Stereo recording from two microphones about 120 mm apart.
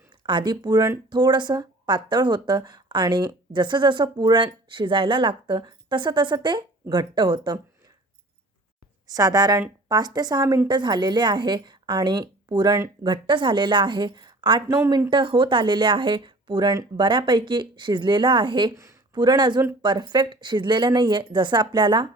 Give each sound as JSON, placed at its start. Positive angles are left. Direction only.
{"t": 0.2, "sound": "speech", "side_deg": -40}
{"t": 9.0, "sound": "speech", "side_deg": -30}